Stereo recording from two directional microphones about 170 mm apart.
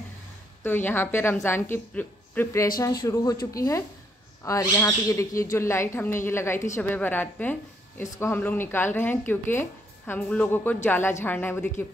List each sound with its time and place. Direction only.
0.7 s speech: 10° left (ahead or behind)